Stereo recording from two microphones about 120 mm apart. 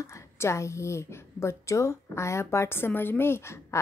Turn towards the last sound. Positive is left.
turn(degrees=25)  # may be behind; listen again after turning